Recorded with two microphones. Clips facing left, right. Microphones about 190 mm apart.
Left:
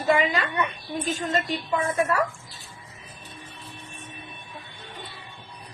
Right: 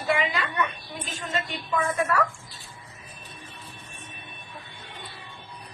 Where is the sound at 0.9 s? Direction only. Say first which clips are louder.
Left 7 dB; 40° left (ahead or behind); by 2.2 s 25° left (ahead or behind).